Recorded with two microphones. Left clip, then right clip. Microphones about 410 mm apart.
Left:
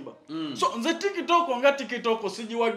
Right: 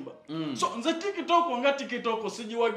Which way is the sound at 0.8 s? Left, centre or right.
Left.